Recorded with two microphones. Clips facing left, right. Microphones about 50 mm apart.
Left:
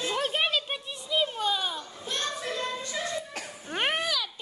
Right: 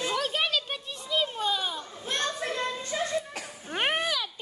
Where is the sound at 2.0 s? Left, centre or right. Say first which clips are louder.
Right 2 dB; right.